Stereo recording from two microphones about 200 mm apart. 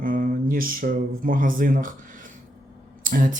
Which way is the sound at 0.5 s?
45° right (ahead or behind).